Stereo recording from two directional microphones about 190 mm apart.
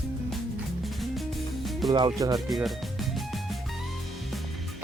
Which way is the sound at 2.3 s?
Centre (ahead or behind).